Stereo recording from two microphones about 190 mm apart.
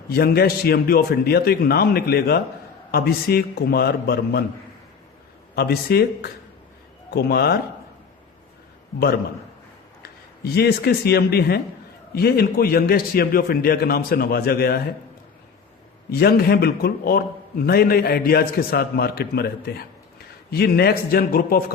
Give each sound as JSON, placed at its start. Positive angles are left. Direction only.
{"t": 0.1, "sound": "a man's voice", "side_deg": 55}
{"t": 5.5, "sound": "a man's voice", "side_deg": 55}
{"t": 10.0, "sound": "a man's voice", "side_deg": 55}
{"t": 16.1, "sound": "a man's voice", "side_deg": 55}